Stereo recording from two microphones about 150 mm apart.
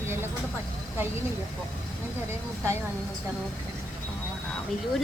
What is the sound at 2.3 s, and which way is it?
Speech, 20° right (ahead or behind).